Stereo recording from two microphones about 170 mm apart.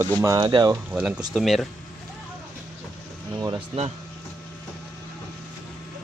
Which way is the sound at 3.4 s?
20° right (ahead or behind).